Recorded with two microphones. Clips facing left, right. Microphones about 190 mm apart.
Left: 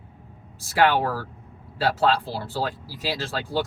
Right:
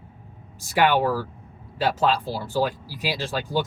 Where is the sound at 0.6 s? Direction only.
15° right (ahead or behind).